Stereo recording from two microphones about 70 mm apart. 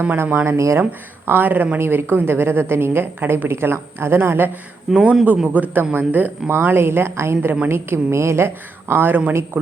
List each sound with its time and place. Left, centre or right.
0.2 s a woman's voice: right
0.5 s speech: right
0.8 s a woman's voice: right
4.9 s speech: centre
5.5 s a woman's voice: right